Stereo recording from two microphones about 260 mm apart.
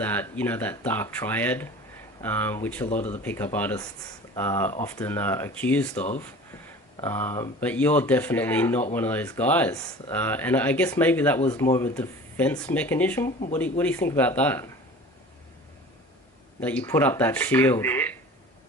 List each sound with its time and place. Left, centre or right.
0.0 s speech: centre
7.0 s speech: centre
16.6 s speech: centre